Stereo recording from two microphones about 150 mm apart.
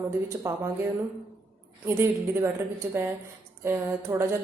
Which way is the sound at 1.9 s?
15° right (ahead or behind).